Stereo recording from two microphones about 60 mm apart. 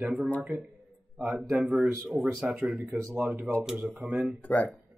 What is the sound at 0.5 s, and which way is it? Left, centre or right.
Speech, right.